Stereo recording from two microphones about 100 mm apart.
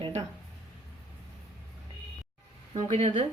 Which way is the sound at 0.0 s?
90° right.